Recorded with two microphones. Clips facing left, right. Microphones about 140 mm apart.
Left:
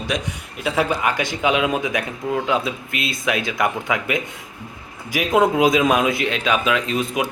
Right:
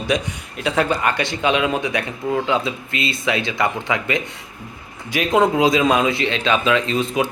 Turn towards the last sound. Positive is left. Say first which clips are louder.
# right 2 dB
turn(degrees=5)  # may be behind; listen again after turning